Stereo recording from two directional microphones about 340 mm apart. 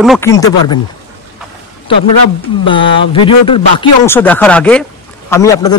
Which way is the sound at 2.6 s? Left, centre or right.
Centre.